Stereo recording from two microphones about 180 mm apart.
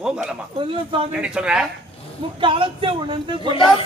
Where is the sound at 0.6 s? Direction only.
30° right (ahead or behind).